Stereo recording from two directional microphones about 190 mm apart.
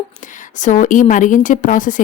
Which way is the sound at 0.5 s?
40° left (ahead or behind).